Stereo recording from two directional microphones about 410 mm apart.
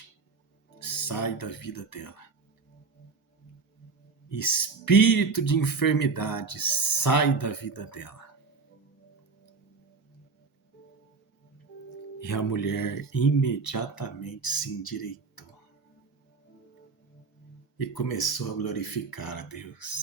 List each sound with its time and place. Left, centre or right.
0.9 s speech: left
4.3 s speech: left
12.2 s speech: left
17.7 s speech: left